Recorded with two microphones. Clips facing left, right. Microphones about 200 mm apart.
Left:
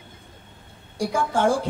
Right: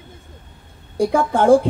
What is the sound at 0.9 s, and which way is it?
Speech, 55° right (ahead or behind).